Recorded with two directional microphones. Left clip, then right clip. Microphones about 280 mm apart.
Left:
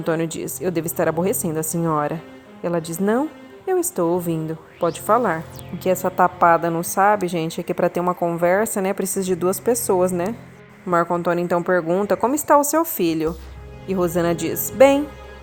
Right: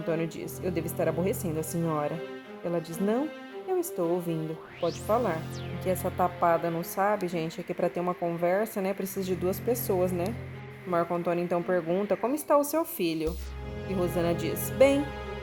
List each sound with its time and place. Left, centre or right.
0.0 s speech: left